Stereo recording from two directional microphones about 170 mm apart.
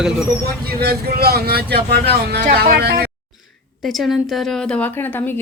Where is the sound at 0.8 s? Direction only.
65° right (ahead or behind).